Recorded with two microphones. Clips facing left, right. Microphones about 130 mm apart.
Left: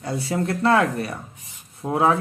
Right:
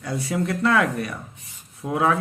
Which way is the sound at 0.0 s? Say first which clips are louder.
Left 1 dB; 30° left (ahead or behind).